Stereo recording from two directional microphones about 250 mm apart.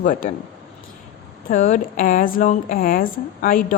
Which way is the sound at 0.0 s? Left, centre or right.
Left.